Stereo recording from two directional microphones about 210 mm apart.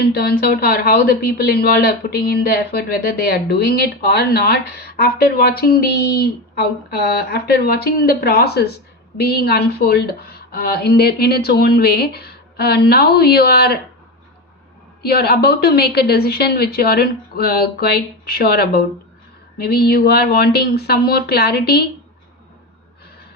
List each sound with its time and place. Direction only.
0.0 s speech: 45° left (ahead or behind)
15.0 s speech: 50° left (ahead or behind)